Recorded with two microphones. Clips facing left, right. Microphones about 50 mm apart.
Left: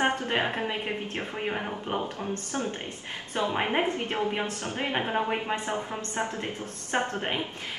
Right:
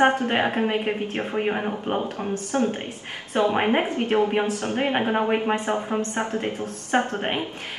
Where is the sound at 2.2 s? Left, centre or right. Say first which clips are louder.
Right 7 dB; right.